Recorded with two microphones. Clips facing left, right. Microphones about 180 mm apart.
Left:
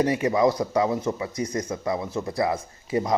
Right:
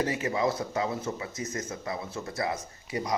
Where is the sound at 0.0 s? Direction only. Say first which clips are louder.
Left 7 dB; 30° left (ahead or behind).